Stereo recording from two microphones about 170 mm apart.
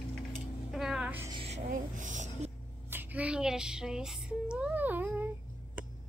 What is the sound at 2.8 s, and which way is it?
Female singing, 10° right (ahead or behind).